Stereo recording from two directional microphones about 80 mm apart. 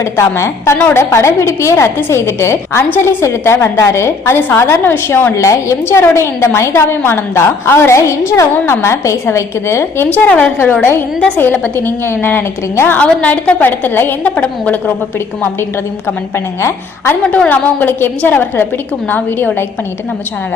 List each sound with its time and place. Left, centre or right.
0.0 s a woman's voice: left
10.1 s a woman's voice: centre
13.0 s a woman's voice: centre
16.6 s a woman's voice: left
17.3 s a woman's voice: left